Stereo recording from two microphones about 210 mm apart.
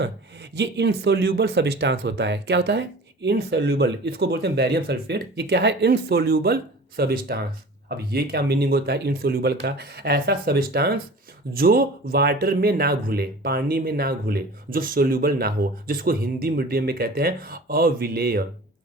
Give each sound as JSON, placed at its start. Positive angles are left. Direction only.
{"t": 0.5, "sound": "speech", "side_deg": -55}